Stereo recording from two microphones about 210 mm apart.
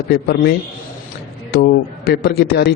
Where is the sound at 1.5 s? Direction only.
50° left (ahead or behind).